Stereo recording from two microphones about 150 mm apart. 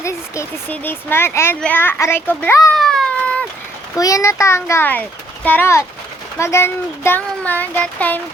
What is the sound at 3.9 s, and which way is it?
A child's voice, 20° left (ahead or behind).